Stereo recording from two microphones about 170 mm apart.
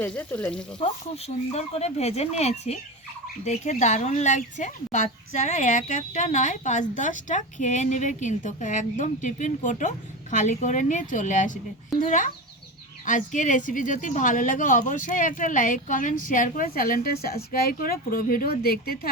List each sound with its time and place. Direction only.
0.0 s speech: 10° left (ahead or behind)
0.8 s speech: 35° left (ahead or behind); by 19.1 s 65° left (ahead or behind)